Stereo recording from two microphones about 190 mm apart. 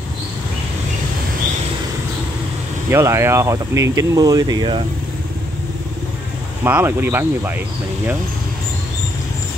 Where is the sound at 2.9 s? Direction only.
15° right (ahead or behind).